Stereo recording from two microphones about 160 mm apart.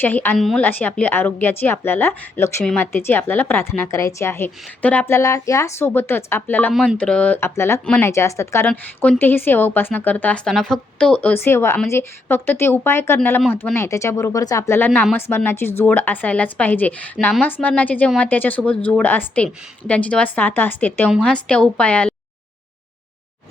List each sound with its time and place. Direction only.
0.0 s speech: 10° left (ahead or behind)